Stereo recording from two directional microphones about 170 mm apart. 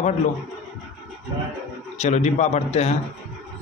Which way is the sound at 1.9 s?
40° left (ahead or behind).